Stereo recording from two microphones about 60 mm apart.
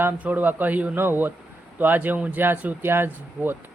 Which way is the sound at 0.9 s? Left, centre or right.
Right.